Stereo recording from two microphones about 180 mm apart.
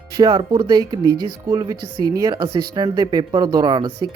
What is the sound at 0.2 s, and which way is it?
Speech, 20° right (ahead or behind).